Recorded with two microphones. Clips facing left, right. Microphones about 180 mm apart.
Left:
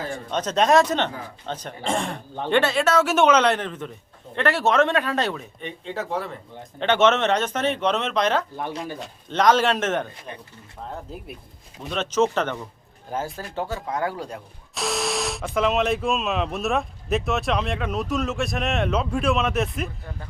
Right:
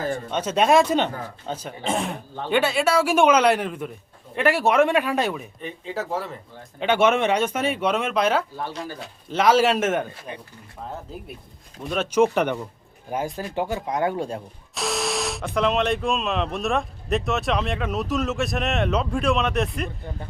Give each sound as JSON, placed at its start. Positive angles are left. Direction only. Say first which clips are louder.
{"t": 0.3, "sound": "speech", "louder": "even", "side_deg": -5}
{"t": 11.1, "sound": "speech", "louder": "even", "side_deg": 0}
{"t": 14.8, "sound": "speech", "louder": "even", "side_deg": 0}